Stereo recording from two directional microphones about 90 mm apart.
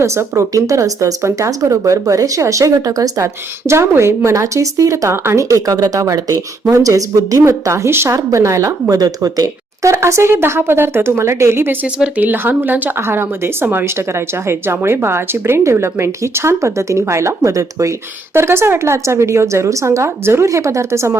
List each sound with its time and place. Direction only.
0.0 s speech: 30° right (ahead or behind)
9.9 s speech: 30° right (ahead or behind)